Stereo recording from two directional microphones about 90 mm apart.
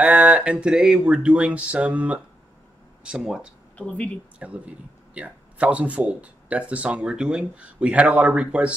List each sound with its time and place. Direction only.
0.0 s a man's voice: 15° right (ahead or behind)
3.7 s speech: 15° left (ahead or behind)
4.4 s a man's voice: 15° right (ahead or behind)